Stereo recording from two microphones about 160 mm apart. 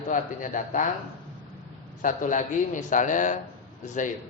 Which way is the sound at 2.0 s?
55° left (ahead or behind).